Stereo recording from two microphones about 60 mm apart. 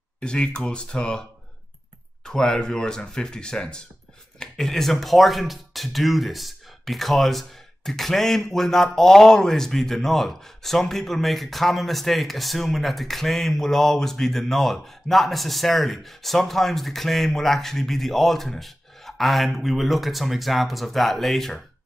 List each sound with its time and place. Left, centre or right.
0.2 s speech: centre
2.2 s speech: centre